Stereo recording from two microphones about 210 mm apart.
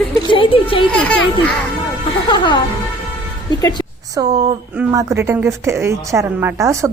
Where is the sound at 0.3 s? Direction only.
25° left (ahead or behind).